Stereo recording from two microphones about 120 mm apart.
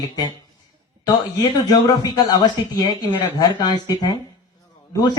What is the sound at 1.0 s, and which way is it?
Speech, 30° left (ahead or behind).